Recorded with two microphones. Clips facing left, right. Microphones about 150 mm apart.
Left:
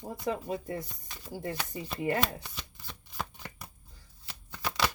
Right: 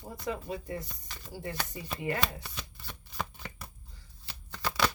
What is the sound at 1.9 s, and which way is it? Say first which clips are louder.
Speech: left 3 dB; 40° left (ahead or behind).